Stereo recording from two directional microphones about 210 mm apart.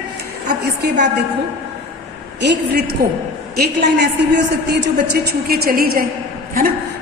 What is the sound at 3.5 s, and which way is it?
A woman's voice, 50° right (ahead or behind).